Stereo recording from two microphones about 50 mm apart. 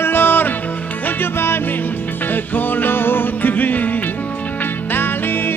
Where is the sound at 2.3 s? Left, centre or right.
Left.